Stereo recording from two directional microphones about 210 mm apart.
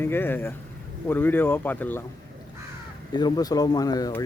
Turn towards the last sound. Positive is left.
turn(degrees=20)  # may be behind; listen again after turning